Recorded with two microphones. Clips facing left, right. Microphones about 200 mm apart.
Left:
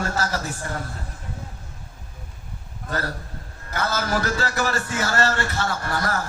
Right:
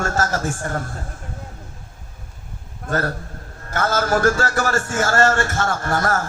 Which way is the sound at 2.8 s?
50° right (ahead or behind).